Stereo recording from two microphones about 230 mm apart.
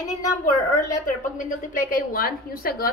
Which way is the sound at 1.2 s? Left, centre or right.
Left.